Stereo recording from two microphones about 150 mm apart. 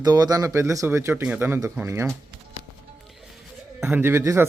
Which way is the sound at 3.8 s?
15° right (ahead or behind).